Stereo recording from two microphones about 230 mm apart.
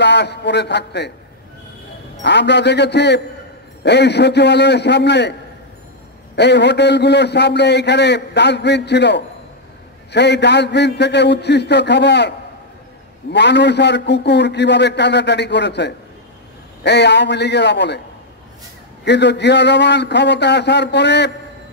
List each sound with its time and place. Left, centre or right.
0.0 s a man's voice: left
2.2 s a man's voice: left
6.3 s a man's voice: left
19.0 s a man's voice: left